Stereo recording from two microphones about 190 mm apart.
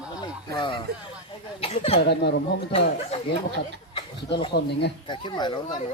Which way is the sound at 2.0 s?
60° left (ahead or behind).